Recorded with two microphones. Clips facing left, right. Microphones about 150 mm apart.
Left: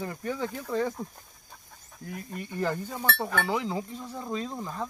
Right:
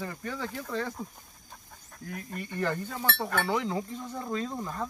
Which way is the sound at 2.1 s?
10° left (ahead or behind).